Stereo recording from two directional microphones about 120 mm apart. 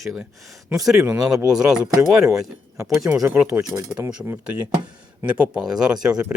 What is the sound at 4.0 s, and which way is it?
Speech, 20° right (ahead or behind).